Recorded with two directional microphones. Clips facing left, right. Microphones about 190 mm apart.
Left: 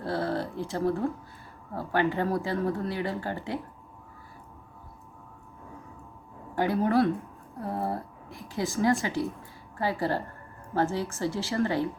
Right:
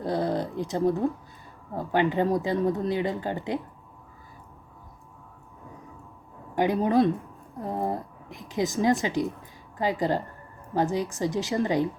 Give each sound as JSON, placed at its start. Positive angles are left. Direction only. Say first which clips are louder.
{"t": 0.0, "sound": "a woman's voice", "louder": "right 3 dB", "side_deg": -15}
{"t": 6.6, "sound": "a woman's voice", "louder": "right 2 dB", "side_deg": -15}